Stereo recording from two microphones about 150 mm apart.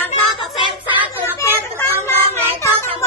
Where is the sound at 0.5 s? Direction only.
30° left (ahead or behind).